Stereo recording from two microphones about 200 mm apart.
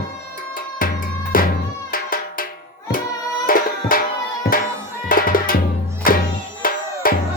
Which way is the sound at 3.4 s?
45° left (ahead or behind).